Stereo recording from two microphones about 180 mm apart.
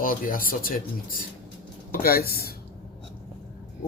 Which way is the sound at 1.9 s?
55° left (ahead or behind).